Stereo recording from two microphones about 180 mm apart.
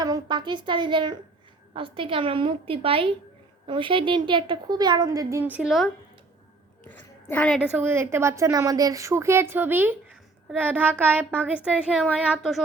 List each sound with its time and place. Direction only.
0.0 s a woman's voice: 25° right (ahead or behind); by 5.9 s centre (ahead or behind)
6.8 s a sound: 10° left (ahead or behind)
7.6 s a woman's voice: 10° right (ahead or behind)